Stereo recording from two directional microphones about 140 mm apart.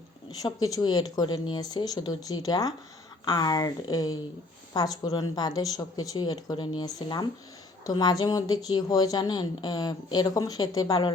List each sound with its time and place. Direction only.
0.4 s a woman's voice: 30° left (ahead or behind)